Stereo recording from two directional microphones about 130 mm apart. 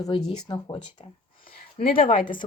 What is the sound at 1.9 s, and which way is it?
Speech, 90° left.